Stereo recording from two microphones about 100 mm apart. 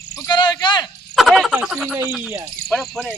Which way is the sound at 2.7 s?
5° left (ahead or behind).